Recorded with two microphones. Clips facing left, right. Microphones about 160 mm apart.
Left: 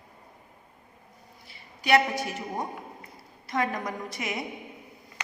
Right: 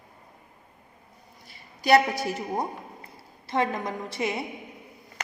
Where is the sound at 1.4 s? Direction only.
40° right (ahead or behind).